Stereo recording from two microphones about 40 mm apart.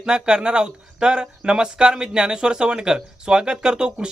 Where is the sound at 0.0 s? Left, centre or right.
Right.